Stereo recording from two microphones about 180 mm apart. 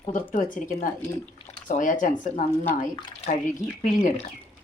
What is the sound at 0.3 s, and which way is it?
Speech, 45° left (ahead or behind).